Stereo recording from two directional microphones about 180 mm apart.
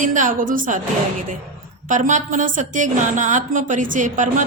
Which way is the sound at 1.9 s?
45° right (ahead or behind).